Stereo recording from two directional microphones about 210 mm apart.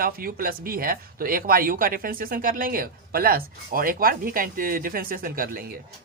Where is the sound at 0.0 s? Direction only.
45° right (ahead or behind).